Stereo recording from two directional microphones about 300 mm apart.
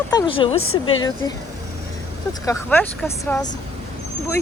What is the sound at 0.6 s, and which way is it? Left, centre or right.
Speech, left.